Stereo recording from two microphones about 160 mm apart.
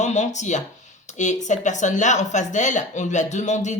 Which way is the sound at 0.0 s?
45° left (ahead or behind).